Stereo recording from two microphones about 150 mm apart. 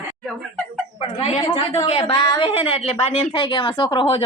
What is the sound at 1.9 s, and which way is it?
Speech, 40° left (ahead or behind).